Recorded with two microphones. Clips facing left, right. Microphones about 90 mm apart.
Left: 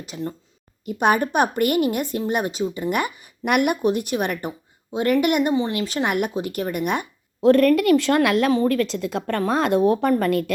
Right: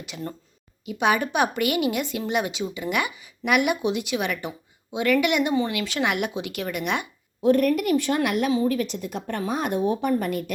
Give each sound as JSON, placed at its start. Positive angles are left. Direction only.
{"t": 0.1, "sound": "speech", "side_deg": 15}
{"t": 0.9, "sound": "a woman's voice", "side_deg": 50}
{"t": 7.4, "sound": "a woman's voice", "side_deg": 90}